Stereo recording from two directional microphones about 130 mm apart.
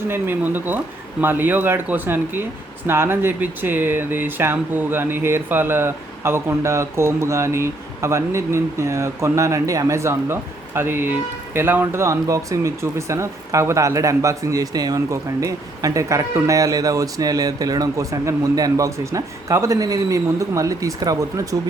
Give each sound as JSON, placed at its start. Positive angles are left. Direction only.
{"t": 0.1, "sound": "speech", "side_deg": -15}